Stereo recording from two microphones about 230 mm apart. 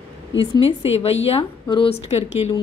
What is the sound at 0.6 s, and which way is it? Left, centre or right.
A woman's voice, left.